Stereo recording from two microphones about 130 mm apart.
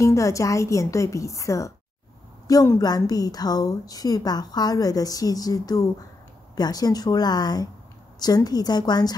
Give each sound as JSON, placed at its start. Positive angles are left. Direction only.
{"t": 0.0, "sound": "a woman's voice", "side_deg": 25}